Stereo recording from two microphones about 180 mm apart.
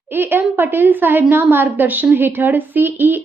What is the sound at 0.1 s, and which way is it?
A woman's voice, 10° right (ahead or behind).